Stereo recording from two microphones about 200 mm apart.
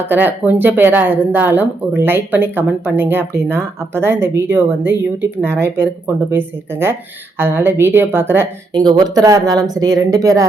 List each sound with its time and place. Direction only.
0.0 s speech: 10° right (ahead or behind)